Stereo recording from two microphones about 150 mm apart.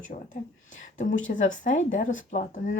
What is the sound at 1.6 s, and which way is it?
Speech, 55° left (ahead or behind).